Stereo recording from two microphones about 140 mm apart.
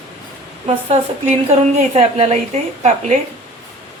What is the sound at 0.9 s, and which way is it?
A woman's voice, 45° right (ahead or behind).